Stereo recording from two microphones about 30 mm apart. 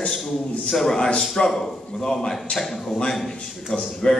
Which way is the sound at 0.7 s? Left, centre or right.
Centre.